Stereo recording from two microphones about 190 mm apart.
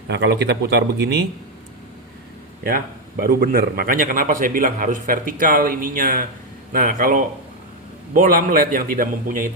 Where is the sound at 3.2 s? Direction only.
50° right (ahead or behind).